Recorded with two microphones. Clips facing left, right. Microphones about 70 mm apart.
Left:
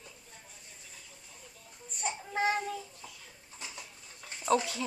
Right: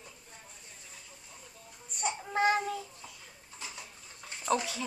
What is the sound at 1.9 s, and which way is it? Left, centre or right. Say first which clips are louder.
Baby cry: right 2 dB; centre.